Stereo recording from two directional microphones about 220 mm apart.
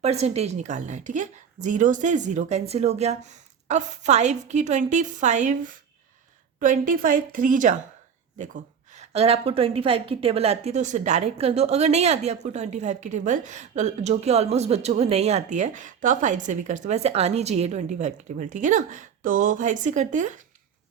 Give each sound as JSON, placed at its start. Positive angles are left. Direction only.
{"t": 0.0, "sound": "a woman's voice", "side_deg": -30}
{"t": 8.9, "sound": "a woman's voice", "side_deg": -30}